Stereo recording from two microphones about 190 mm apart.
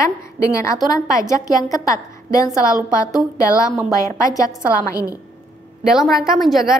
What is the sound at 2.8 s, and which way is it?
Speech, 5° right (ahead or behind).